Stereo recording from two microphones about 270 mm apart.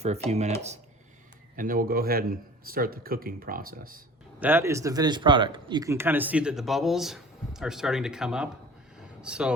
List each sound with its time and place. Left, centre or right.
0.0 s speech: right
4.4 s speech: centre
9.0 s a sound: centre